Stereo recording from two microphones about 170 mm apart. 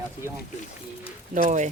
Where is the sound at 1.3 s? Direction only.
45° right (ahead or behind).